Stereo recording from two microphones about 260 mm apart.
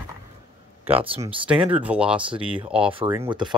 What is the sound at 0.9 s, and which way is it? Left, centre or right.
Speech, right.